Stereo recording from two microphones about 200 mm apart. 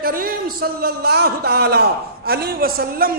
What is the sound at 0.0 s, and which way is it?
Speech, 45° right (ahead or behind).